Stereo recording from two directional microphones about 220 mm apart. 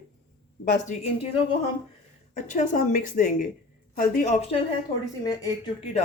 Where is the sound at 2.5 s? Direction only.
35° left (ahead or behind).